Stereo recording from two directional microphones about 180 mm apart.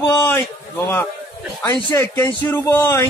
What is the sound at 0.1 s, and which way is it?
Speech, 15° left (ahead or behind).